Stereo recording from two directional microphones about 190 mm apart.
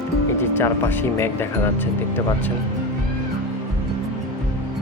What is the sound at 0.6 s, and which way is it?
Speech, 10° left (ahead or behind).